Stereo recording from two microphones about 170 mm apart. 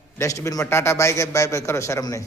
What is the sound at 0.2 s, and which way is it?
A man's voice, 15° left (ahead or behind).